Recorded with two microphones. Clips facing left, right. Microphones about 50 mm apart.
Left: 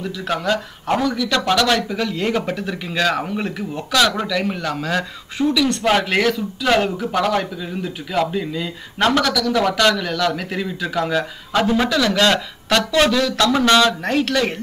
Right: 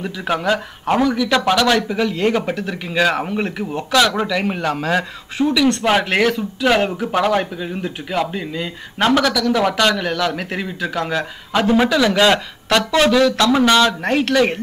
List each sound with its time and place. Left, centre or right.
0.0 s speech: centre
11.0 s a man's voice: centre
11.6 s speech: centre